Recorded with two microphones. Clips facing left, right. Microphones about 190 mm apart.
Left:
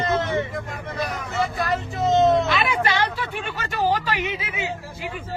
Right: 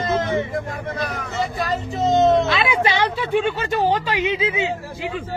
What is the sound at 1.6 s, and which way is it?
A woman's voice, 20° right (ahead or behind).